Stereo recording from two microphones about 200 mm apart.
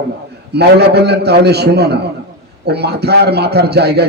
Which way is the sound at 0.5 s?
55° right (ahead or behind).